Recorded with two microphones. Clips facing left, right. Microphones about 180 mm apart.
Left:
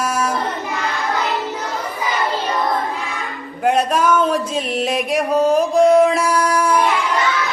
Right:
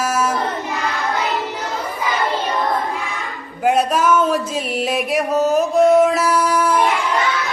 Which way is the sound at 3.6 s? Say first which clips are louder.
Even; 5° right (ahead or behind).